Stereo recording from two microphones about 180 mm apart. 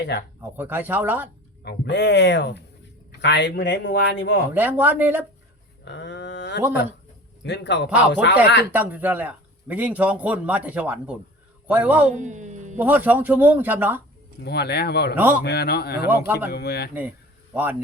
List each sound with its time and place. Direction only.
0.5 s speech: 10° right (ahead or behind)
1.6 s speech: 70° left (ahead or behind)
4.5 s speech: 10° right (ahead or behind)
5.8 s speech: 75° left (ahead or behind)
8.7 s speech: 10° right (ahead or behind)
12.1 s music: 40° right (ahead or behind)
12.8 s speech: 10° right (ahead or behind)
14.4 s speech: 65° left (ahead or behind)
15.1 s speech: 10° right (ahead or behind)
15.4 s speech: 60° left (ahead or behind)
16.0 s speech: 10° right (ahead or behind)
16.5 s speech: 60° left (ahead or behind)
16.9 s speech: 10° right (ahead or behind)